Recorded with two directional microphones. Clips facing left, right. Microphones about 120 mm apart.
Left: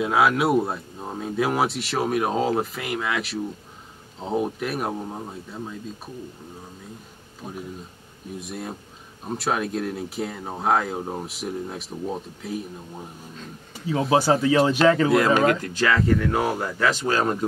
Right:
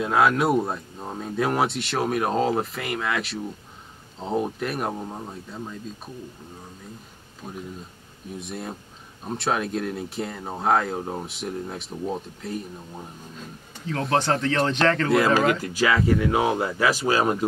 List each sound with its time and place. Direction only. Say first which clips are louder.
0.0 s speech: even; centre (ahead or behind)
7.4 s speech: left 1 dB; 5° left (ahead or behind)
13.8 s speech: left 3 dB; 10° left (ahead or behind); by 17.5 s 10° right (ahead or behind)